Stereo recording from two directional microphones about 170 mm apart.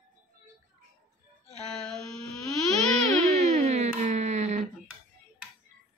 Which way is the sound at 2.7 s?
40° right (ahead or behind).